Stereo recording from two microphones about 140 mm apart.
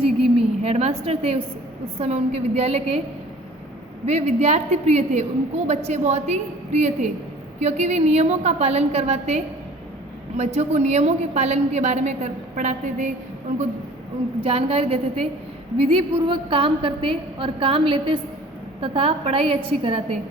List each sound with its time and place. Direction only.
0.0 s a woman's voice: 45° right (ahead or behind)
4.0 s a woman's voice: 50° right (ahead or behind)
14.4 s a woman's voice: 45° right (ahead or behind)